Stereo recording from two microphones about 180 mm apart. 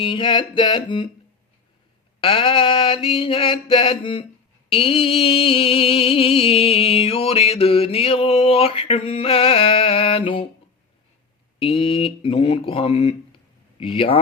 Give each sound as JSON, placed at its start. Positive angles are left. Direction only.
{"t": 0.0, "sound": "mantra", "side_deg": 25}
{"t": 2.2, "sound": "mantra", "side_deg": 30}
{"t": 4.7, "sound": "music", "side_deg": 30}
{"t": 11.6, "sound": "music", "side_deg": 30}
{"t": 13.7, "sound": "speech", "side_deg": 30}